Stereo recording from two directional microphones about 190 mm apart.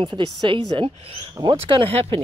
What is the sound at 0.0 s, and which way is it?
Speech, 25° right (ahead or behind).